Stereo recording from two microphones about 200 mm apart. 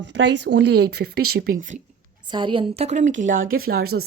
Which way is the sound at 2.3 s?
25° right (ahead or behind).